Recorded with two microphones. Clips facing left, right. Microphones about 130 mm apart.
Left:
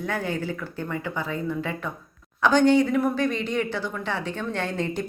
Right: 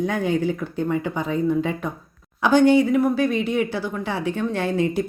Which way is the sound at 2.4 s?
10° right (ahead or behind).